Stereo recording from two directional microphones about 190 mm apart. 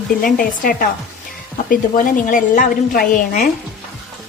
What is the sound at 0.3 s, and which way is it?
A woman's voice, 50° left (ahead or behind).